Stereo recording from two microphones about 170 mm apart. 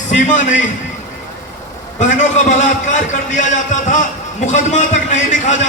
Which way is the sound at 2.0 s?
45° left (ahead or behind).